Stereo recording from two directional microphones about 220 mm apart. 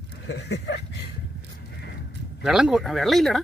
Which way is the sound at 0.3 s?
50° left (ahead or behind).